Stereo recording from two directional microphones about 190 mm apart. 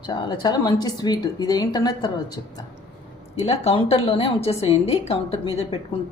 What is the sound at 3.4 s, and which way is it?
A woman's voice, 30° left (ahead or behind).